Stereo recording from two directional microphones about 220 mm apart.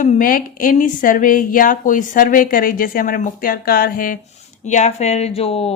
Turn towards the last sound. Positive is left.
turn(degrees=25)  # may be behind; listen again after turning